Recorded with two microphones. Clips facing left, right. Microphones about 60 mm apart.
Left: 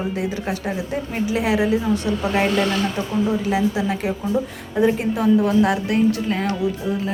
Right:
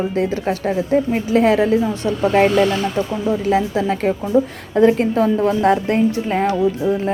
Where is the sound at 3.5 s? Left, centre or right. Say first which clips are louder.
Right 3 dB; right.